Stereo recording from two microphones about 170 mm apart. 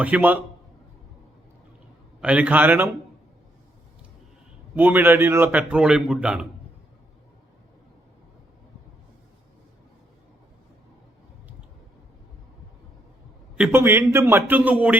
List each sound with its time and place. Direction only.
0.0 s a man's voice: 10° right (ahead or behind)
2.2 s a man's voice: 10° right (ahead or behind)
4.7 s a man's voice: 10° right (ahead or behind)
13.6 s a man's voice: 10° right (ahead or behind)